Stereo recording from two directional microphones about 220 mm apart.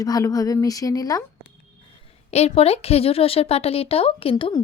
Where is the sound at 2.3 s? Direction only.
30° left (ahead or behind).